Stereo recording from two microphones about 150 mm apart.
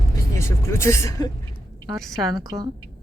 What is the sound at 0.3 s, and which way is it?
Speech, 20° left (ahead or behind).